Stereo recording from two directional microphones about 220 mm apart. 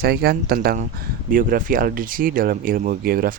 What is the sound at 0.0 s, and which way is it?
Speech, 45° right (ahead or behind).